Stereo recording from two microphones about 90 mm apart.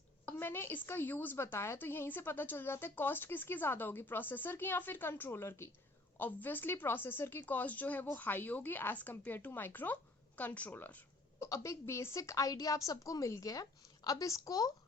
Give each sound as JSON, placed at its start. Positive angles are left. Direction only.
{"t": 0.3, "sound": "a woman's voice", "side_deg": 25}
{"t": 11.4, "sound": "a woman's voice", "side_deg": 35}